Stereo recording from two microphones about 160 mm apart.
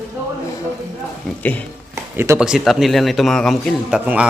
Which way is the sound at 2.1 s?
15° right (ahead or behind).